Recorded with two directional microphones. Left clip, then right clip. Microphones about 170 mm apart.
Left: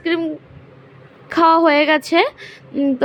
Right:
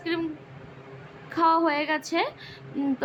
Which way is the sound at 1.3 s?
40° left (ahead or behind).